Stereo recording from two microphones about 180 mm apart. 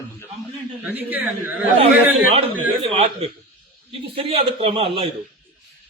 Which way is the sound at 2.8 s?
35° right (ahead or behind).